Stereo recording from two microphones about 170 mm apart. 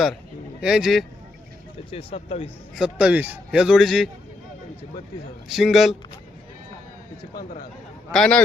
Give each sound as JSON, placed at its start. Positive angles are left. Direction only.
{"t": 0.6, "sound": "a man's voice", "side_deg": -5}
{"t": 1.9, "sound": "speech", "side_deg": 35}
{"t": 2.7, "sound": "a man's voice", "side_deg": -5}
{"t": 5.5, "sound": "a man's voice", "side_deg": 0}
{"t": 7.3, "sound": "speech", "side_deg": 60}
{"t": 8.1, "sound": "a man's voice", "side_deg": 5}